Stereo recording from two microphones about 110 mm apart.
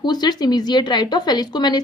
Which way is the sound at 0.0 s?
40° left (ahead or behind).